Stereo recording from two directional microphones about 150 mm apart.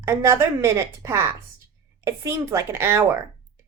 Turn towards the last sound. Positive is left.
turn(degrees=-15)  # may be behind; listen again after turning